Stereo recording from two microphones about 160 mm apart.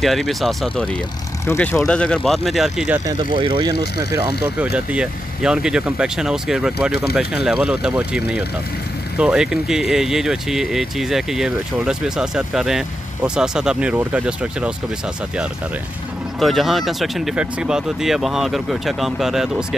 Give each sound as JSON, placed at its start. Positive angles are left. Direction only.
{"t": 0.0, "sound": "speech", "side_deg": 0}
{"t": 1.4, "sound": "speech", "side_deg": 15}
{"t": 3.1, "sound": "speech", "side_deg": -30}
{"t": 4.7, "sound": "speech", "side_deg": -5}
{"t": 9.2, "sound": "speech", "side_deg": -5}
{"t": 16.3, "sound": "speech", "side_deg": 0}